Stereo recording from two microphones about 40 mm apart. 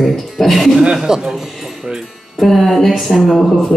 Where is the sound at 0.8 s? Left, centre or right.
Centre.